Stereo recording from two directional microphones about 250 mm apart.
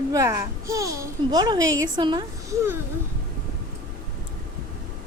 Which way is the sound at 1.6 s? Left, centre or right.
Right.